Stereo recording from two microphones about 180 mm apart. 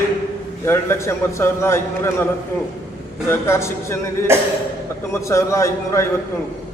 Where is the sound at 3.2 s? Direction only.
15° left (ahead or behind).